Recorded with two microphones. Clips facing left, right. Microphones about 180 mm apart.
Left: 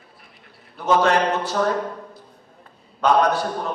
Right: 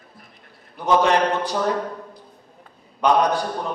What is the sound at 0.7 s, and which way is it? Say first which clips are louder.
Speech: even; 15° right (ahead or behind).